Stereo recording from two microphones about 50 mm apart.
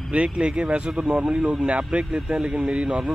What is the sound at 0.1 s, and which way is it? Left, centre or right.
Speech, right.